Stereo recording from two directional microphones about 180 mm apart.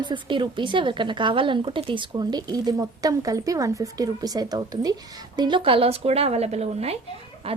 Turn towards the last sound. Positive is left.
turn(degrees=-35)  # may be behind; listen again after turning